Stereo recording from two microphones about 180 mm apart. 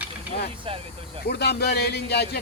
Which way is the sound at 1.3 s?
65° left (ahead or behind).